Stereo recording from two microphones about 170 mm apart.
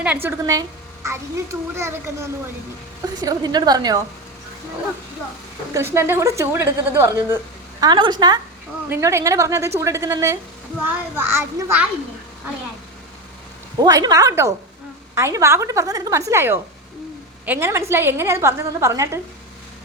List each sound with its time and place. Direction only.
0.0 s a woman's voice: 10° right (ahead or behind)
1.7 s a woman's voice: 15° right (ahead or behind)
5.7 s a woman's voice: 15° right (ahead or behind)
7.8 s a woman's voice: 25° right (ahead or behind)
13.7 s a woman's voice: 20° right (ahead or behind)